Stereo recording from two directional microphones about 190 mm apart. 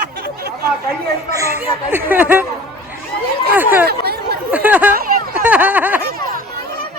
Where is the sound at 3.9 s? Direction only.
55° right (ahead or behind).